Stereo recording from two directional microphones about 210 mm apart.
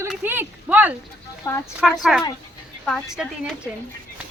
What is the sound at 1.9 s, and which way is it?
Speech, centre (ahead or behind).